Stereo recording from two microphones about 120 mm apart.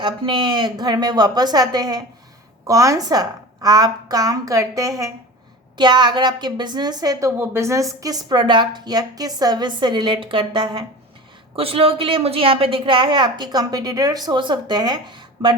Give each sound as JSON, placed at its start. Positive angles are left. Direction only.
{"t": 0.0, "sound": "a woman's voice", "side_deg": -40}
{"t": 5.7, "sound": "a woman's voice", "side_deg": -40}
{"t": 11.5, "sound": "a woman's voice", "side_deg": -55}